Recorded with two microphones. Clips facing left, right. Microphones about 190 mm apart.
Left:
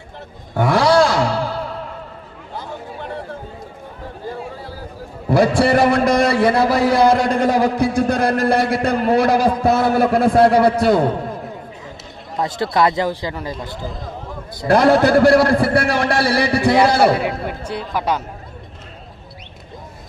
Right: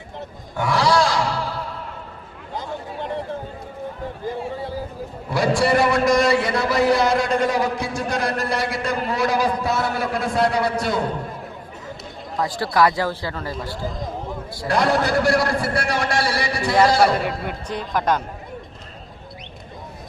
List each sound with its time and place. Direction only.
0.5 s a sound: 55° left (ahead or behind)
2.6 s a sound: 20° right (ahead or behind)
5.3 s a man's voice: 55° left (ahead or behind)
12.4 s speech: 20° left (ahead or behind)
14.7 s a man's voice: 55° left (ahead or behind)
17.5 s speech: 5° left (ahead or behind)